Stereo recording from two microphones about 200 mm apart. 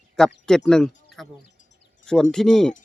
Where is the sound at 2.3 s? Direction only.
5° left (ahead or behind).